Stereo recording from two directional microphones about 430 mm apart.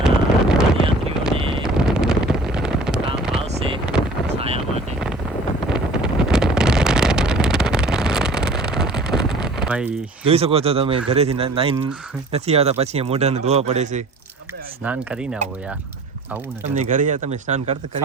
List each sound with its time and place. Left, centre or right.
0.0 s wind noise: centre
1.4 s wind noise: centre
1.6 s wind noise: centre
3.2 s a sound: centre
3.5 s vehicle: centre
5.6 s wind noise: centre
10.2 s speech: centre
14.8 s speech: centre
16.6 s speech: centre